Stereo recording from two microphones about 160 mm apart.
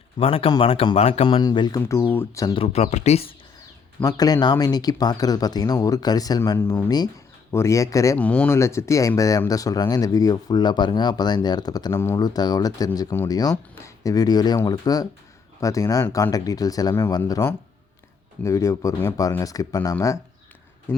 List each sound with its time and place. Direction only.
0.2 s speech: 35° left (ahead or behind); by 2.6 s 20° left (ahead or behind)
2.6 s speech: 40° left (ahead or behind)
4.0 s speech: 25° left (ahead or behind)
8.2 s speech: 10° left (ahead or behind)